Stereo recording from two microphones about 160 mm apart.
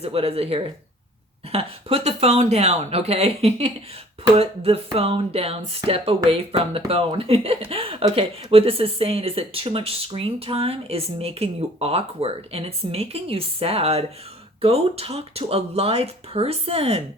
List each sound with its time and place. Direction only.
0.0 s speech: 40° right (ahead or behind)